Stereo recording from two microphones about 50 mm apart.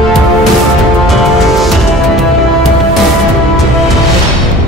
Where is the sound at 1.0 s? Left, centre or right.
Centre.